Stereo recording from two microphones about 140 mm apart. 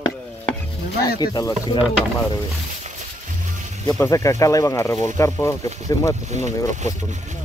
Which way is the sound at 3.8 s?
20° left (ahead or behind).